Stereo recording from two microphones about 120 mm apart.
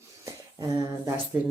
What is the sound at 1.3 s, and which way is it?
Speech, 20° right (ahead or behind).